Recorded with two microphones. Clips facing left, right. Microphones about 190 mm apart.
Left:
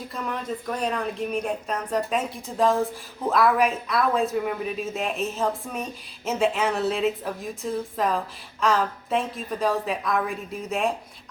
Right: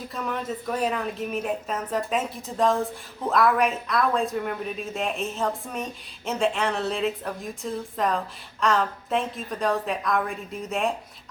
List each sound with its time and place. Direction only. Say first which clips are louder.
0.1 s speech: right 1 dB; centre (ahead or behind)